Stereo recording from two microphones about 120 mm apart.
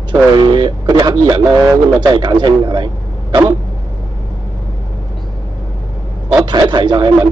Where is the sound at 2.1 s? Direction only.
40° right (ahead or behind).